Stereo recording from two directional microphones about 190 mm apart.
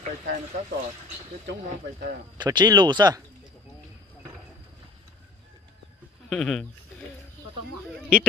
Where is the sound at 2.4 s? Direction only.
20° right (ahead or behind).